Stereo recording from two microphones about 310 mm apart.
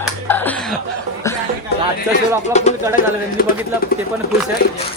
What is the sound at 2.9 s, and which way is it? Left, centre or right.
Speech, left.